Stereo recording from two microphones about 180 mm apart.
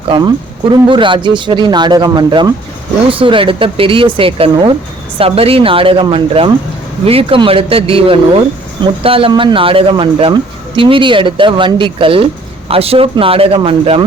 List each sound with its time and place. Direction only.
0.1 s speech: 25° right (ahead or behind)